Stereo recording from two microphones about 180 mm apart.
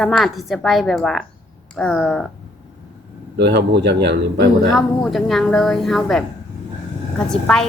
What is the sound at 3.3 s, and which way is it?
Speech, 70° right (ahead or behind).